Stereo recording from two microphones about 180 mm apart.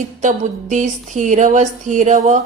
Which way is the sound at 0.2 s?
45° right (ahead or behind).